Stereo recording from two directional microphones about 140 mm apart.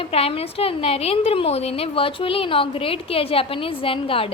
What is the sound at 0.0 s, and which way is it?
A woman's voice, 45° left (ahead or behind).